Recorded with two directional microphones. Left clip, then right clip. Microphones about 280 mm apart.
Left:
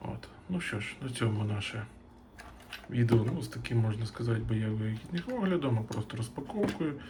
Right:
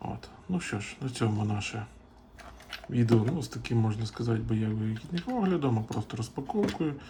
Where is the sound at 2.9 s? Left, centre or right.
Centre.